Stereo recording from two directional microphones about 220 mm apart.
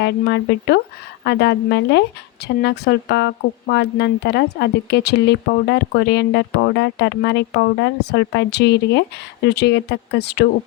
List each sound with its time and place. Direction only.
0.0 s speech: 50° left (ahead or behind)